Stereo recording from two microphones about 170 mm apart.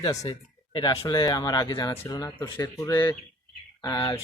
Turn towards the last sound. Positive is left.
turn(degrees=20)  # may be behind; listen again after turning